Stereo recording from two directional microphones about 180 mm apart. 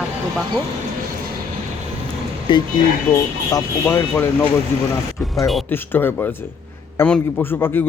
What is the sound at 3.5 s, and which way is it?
Speech, 10° left (ahead or behind).